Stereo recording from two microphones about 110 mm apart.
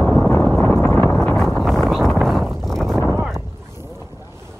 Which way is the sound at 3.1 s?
5° right (ahead or behind).